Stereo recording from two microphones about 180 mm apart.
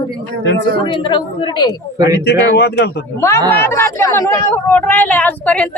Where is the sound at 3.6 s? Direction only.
15° left (ahead or behind).